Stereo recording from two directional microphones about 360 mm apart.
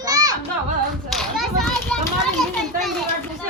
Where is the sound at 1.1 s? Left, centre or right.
Centre.